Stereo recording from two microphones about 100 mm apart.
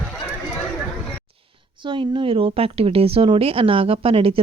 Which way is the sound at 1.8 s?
55° right (ahead or behind).